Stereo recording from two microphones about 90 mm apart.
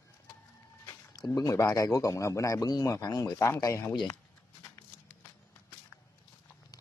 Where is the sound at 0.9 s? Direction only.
40° left (ahead or behind).